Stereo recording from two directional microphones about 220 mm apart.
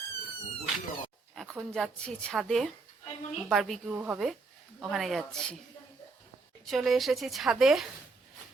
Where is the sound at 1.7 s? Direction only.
5° left (ahead or behind).